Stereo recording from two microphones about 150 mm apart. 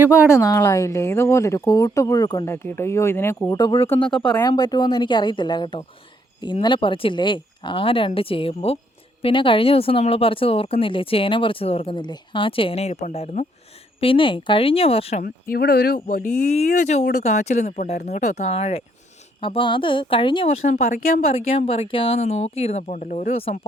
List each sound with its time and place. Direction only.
0.0 s speech: 10° right (ahead or behind)
0.3 s a woman's voice: 20° left (ahead or behind)
3.5 s a woman's voice: 25° left (ahead or behind)
4.1 s speech: 5° left (ahead or behind)
4.4 s a woman's voice: 25° left (ahead or behind); by 11.9 s 40° left (ahead or behind)
11.9 s speech: 30° left (ahead or behind); by 13.5 s 50° left (ahead or behind)
14.0 s speech: 35° left (ahead or behind)
15.2 s speech: 85° left
16.0 s speech: 70° left (ahead or behind)
16.5 s speech: 45° left (ahead or behind)
20.7 s speech: 70° left (ahead or behind)
21.2 s speech: 40° left (ahead or behind); by 23.3 s 60° left (ahead or behind)
23.3 s speech: 45° left (ahead or behind)